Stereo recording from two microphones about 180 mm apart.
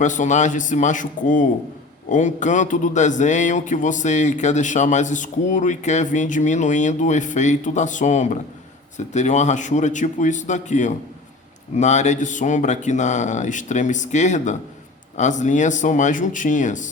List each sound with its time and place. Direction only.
0.0 s speech: 45° left (ahead or behind)